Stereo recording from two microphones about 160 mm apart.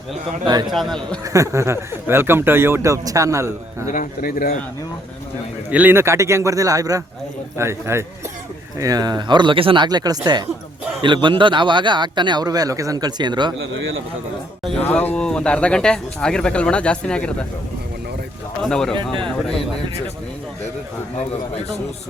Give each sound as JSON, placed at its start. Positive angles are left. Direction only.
{"t": 0.7, "sound": "a man's voice", "side_deg": 0}
{"t": 1.2, "sound": "speech", "side_deg": -20}
{"t": 3.8, "sound": "speech", "side_deg": 55}
{"t": 5.7, "sound": "a man's voice", "side_deg": -10}
{"t": 14.8, "sound": "speech", "side_deg": 10}
{"t": 18.6, "sound": "a man's voice", "side_deg": 5}